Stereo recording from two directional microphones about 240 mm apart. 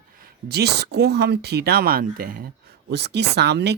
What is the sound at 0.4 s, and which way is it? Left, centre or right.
Speech, right.